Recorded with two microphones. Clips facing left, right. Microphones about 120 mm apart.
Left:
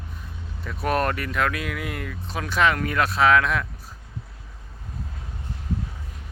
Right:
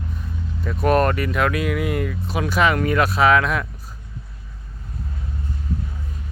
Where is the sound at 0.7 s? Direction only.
Centre (ahead or behind).